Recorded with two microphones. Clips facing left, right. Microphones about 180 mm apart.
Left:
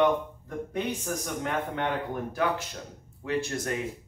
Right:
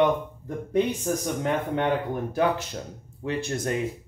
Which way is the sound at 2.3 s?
25° right (ahead or behind).